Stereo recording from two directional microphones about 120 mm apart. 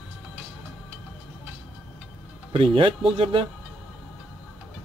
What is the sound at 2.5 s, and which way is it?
Speech, 50° right (ahead or behind).